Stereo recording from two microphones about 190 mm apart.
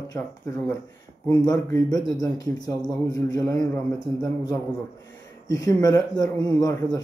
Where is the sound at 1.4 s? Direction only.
20° left (ahead or behind).